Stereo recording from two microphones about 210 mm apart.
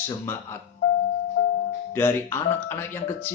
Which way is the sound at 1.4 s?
50° left (ahead or behind).